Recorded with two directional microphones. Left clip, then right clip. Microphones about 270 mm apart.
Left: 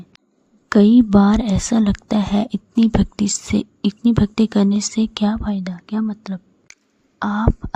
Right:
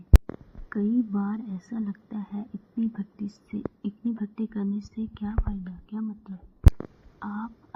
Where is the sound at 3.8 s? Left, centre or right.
Left.